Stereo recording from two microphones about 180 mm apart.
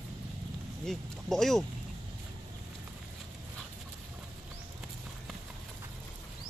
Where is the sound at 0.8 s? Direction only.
Centre (ahead or behind).